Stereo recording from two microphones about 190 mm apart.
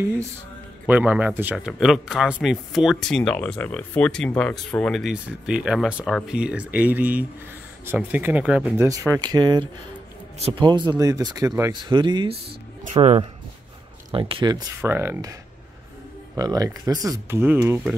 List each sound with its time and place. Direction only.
0.8 s speech: 10° right (ahead or behind)
8.8 s speech: 15° right (ahead or behind)
16.3 s speech: 20° right (ahead or behind)